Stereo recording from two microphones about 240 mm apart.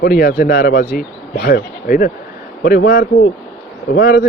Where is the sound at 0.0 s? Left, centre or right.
Left.